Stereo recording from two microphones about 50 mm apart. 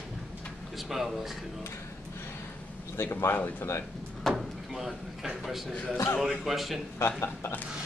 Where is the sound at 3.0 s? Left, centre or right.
Left.